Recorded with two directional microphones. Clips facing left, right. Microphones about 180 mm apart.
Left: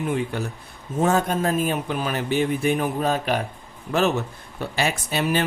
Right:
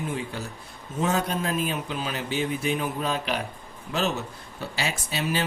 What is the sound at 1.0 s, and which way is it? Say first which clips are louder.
A man's voice: left 5 dB; 50° left (ahead or behind).